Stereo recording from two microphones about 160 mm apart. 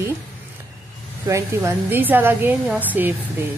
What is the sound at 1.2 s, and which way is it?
A woman's voice, 15° right (ahead or behind).